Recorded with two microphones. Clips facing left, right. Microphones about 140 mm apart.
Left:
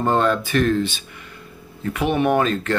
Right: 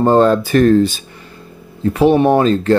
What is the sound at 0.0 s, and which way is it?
Speech, 35° right (ahead or behind).